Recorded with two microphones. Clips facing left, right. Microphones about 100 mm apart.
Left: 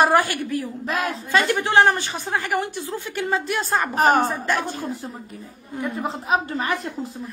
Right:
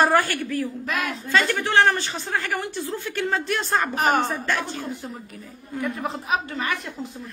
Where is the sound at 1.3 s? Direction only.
15° left (ahead or behind).